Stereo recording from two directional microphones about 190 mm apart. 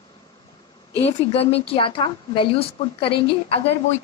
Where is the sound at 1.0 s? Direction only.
30° left (ahead or behind).